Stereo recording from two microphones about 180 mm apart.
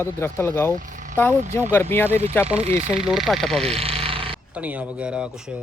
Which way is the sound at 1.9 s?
10° left (ahead or behind).